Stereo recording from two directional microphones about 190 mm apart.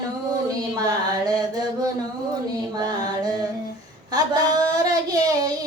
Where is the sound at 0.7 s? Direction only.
20° right (ahead or behind).